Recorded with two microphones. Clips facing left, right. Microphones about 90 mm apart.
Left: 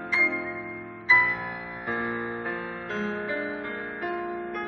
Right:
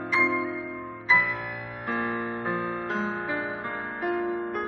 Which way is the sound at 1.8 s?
5° left (ahead or behind).